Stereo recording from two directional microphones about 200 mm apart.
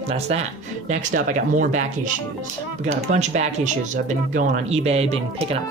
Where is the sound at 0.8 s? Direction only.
40° right (ahead or behind).